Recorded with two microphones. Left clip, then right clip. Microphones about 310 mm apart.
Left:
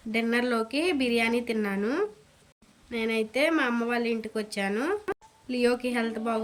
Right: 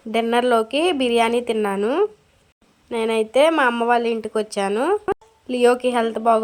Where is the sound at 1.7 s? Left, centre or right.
Right.